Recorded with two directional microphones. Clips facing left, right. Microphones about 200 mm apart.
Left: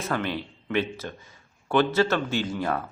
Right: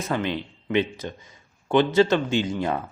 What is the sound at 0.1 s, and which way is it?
A man's voice, 15° right (ahead or behind).